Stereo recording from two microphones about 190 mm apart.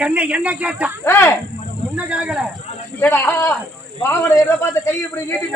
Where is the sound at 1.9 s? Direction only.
5° right (ahead or behind).